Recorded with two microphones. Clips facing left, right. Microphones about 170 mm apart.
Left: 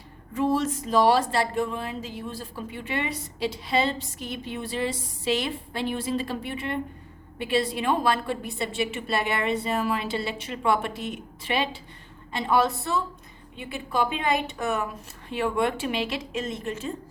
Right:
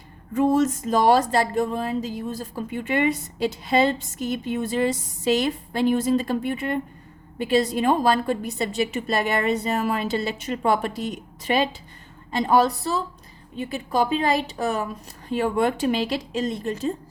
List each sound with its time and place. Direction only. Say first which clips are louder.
0.3 s a woman's voice: right 5 dB; 45° right (ahead or behind)